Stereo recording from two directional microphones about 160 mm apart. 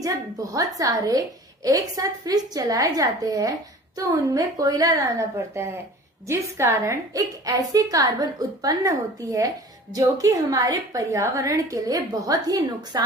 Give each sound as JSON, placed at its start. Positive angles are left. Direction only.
{"t": 0.0, "sound": "a woman's voice", "side_deg": -20}